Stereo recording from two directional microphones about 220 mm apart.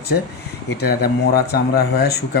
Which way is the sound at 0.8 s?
45° left (ahead or behind).